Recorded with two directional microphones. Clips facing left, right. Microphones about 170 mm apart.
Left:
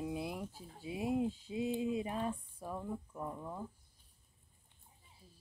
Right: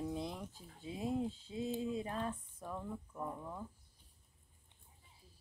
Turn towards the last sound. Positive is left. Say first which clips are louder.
# left 1 dB
turn(degrees=15)  # may be behind; listen again after turning